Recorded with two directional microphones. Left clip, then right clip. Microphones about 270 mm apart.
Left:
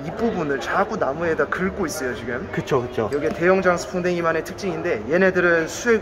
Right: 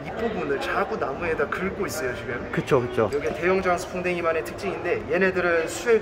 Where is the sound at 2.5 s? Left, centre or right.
Centre.